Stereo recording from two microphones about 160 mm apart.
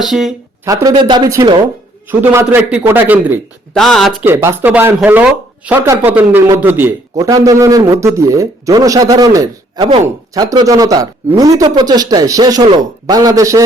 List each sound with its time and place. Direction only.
0.0 s speech: centre (ahead or behind)
0.6 s a man's voice: 20° right (ahead or behind)
3.8 s speech: centre (ahead or behind)
4.2 s a man's voice: 10° right (ahead or behind)